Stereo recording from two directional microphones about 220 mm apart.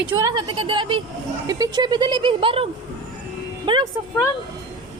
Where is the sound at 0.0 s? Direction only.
10° right (ahead or behind).